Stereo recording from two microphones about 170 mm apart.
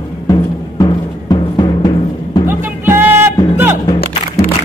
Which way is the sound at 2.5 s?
10° right (ahead or behind).